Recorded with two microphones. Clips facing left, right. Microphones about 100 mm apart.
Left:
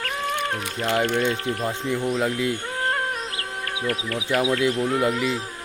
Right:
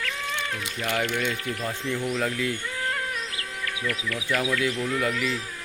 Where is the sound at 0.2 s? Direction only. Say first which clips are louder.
Left 5 dB; 45° left (ahead or behind).